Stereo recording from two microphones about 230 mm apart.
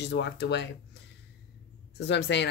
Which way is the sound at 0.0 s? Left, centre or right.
Left.